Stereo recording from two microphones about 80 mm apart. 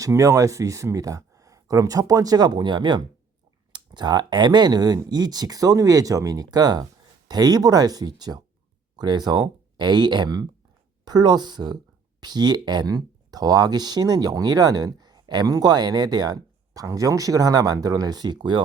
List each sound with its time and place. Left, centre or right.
0.0 s speech: right